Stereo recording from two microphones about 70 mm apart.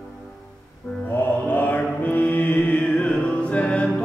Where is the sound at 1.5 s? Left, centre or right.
Left.